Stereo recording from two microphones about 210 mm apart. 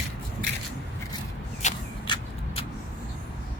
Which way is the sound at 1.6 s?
35° left (ahead or behind).